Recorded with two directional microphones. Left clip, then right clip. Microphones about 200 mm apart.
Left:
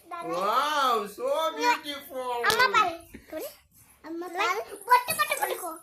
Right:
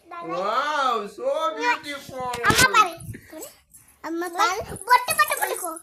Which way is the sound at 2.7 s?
5° right (ahead or behind).